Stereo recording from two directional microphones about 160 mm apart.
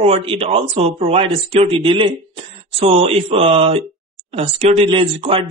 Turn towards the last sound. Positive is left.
turn(degrees=-35)  # may be behind; listen again after turning